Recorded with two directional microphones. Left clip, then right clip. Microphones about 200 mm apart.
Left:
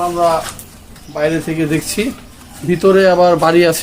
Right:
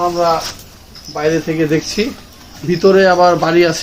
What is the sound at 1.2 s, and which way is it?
Speech, 60° left (ahead or behind).